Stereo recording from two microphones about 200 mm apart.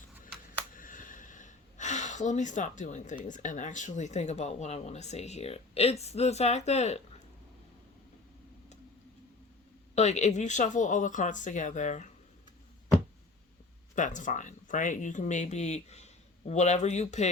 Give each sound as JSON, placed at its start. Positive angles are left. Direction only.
{"t": 0.7, "sound": "a sound", "side_deg": 40}
{"t": 3.2, "sound": "speech", "side_deg": 40}
{"t": 9.9, "sound": "speech", "side_deg": 35}
{"t": 13.9, "sound": "speech", "side_deg": 40}